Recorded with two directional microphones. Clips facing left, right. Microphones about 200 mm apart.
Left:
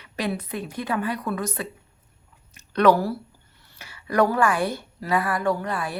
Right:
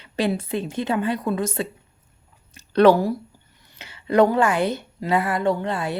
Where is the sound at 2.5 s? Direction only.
30° right (ahead or behind).